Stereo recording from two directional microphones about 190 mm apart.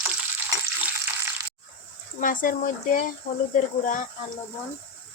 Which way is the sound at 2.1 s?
45° left (ahead or behind).